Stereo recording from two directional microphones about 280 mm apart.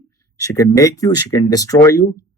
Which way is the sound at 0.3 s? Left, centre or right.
Centre.